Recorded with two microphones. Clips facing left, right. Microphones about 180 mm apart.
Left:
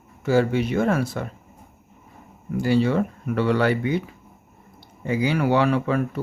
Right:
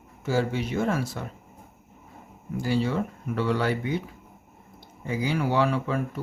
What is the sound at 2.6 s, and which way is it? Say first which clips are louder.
Speech: left 6 dB; 65° left (ahead or behind).